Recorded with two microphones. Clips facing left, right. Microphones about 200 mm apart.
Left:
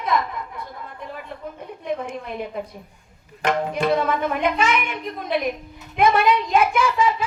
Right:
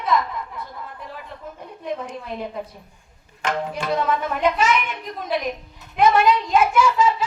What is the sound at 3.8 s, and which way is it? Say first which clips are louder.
Speech: left 2 dB; 55° left (ahead or behind).